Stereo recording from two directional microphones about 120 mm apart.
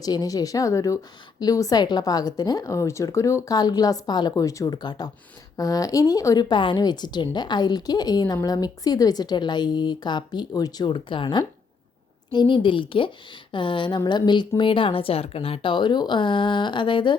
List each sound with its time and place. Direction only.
0.0 s a woman's voice: 30° left (ahead or behind)